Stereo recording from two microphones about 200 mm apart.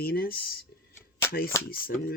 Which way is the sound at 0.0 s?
50° left (ahead or behind).